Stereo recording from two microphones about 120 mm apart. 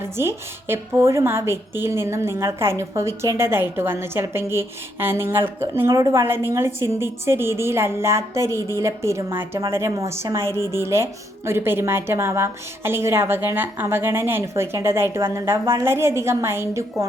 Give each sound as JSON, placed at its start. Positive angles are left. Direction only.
{"t": 0.2, "sound": "a woman's voice", "side_deg": -20}